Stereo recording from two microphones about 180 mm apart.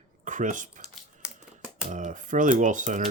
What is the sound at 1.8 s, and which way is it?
Speech, 45° right (ahead or behind).